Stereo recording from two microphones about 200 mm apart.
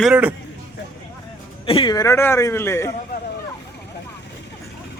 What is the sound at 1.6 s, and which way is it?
A man's voice, 25° left (ahead or behind).